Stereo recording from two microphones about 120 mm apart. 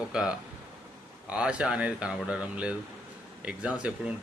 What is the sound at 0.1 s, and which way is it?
Speech, 5° right (ahead or behind).